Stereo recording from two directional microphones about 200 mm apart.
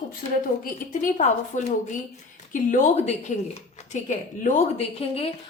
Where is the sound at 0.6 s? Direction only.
40° left (ahead or behind).